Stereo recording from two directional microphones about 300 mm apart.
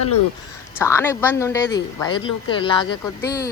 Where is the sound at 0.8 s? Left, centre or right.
Centre.